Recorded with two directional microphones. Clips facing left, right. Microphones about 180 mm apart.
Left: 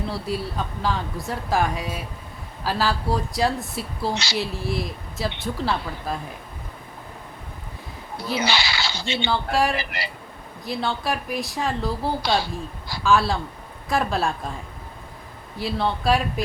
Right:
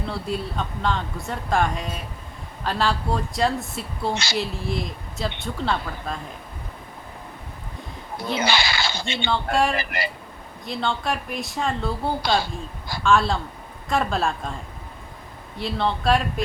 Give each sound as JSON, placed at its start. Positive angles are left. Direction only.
{"t": 0.1, "sound": "speech", "side_deg": 5}
{"t": 4.1, "sound": "speech", "side_deg": -50}
{"t": 4.4, "sound": "speech", "side_deg": 0}
{"t": 8.4, "sound": "a sound", "side_deg": -50}
{"t": 9.2, "sound": "speech", "side_deg": 0}
{"t": 9.7, "sound": "speech", "side_deg": -50}
{"t": 10.7, "sound": "speech", "side_deg": 5}
{"t": 15.5, "sound": "speech", "side_deg": 5}